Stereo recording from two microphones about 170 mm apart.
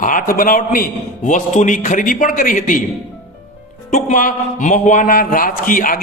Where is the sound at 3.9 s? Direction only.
50° left (ahead or behind).